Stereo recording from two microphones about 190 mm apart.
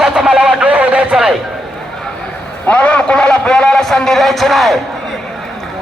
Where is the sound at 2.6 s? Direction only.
5° left (ahead or behind).